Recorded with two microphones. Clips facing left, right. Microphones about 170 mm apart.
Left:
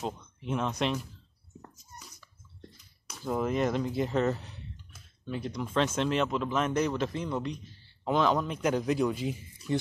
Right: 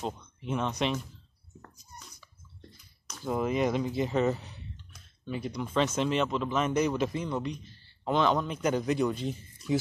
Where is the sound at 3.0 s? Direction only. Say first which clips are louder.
Even; centre (ahead or behind).